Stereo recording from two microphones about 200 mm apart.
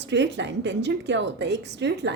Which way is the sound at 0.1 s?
60° right (ahead or behind).